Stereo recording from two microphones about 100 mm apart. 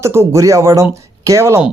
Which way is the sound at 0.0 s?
25° right (ahead or behind).